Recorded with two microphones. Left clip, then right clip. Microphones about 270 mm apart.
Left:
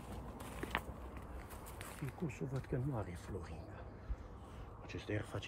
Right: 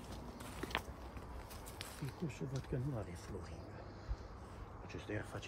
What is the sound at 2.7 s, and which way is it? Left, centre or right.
Speech, centre.